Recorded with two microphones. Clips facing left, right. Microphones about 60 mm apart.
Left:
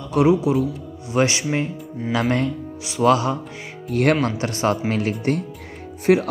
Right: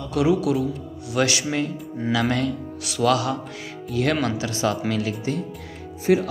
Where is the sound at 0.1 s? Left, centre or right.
Left.